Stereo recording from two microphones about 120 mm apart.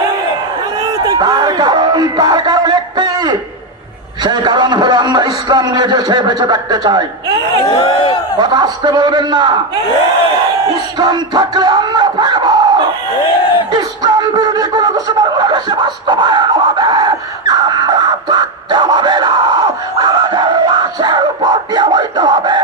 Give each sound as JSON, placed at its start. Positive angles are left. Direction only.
{"t": 0.9, "sound": "a sound", "side_deg": -30}
{"t": 4.2, "sound": "a man's voice", "side_deg": -35}
{"t": 7.8, "sound": "a sound", "side_deg": 45}
{"t": 8.4, "sound": "a man's voice", "side_deg": -35}
{"t": 10.9, "sound": "crowd", "side_deg": -35}
{"t": 13.7, "sound": "beatboxing", "side_deg": -35}